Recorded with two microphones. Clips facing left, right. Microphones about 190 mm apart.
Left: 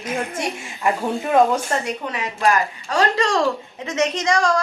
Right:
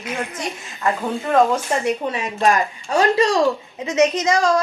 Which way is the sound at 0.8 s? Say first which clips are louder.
Left 1 dB; 10° left (ahead or behind).